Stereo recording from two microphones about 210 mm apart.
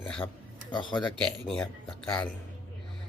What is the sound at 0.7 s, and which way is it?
Speech, 20° left (ahead or behind).